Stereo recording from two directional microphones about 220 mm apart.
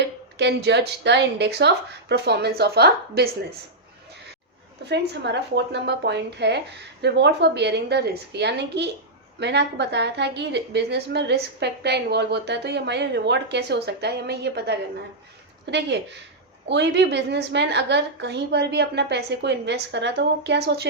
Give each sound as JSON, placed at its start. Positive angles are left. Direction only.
{"t": 0.0, "sound": "a woman's voice", "side_deg": -50}
{"t": 4.9, "sound": "a woman's voice", "side_deg": -50}